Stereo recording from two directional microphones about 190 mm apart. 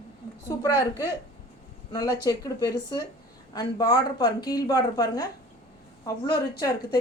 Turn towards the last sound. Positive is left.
turn(degrees=20)  # may be behind; listen again after turning